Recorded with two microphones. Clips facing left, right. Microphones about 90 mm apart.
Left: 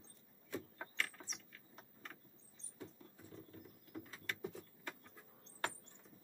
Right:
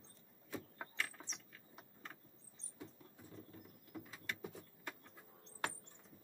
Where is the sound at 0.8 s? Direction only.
10° right (ahead or behind).